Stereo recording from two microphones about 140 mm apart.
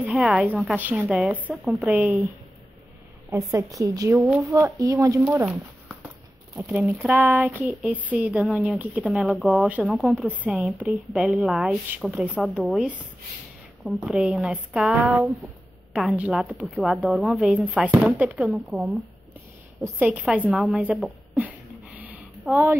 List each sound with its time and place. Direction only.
0.1 s a woman's voice: centre (ahead or behind)
3.3 s a woman's voice: 25° right (ahead or behind)
5.2 s a woman's voice: 10° right (ahead or behind)
22.5 s a woman's voice: centre (ahead or behind)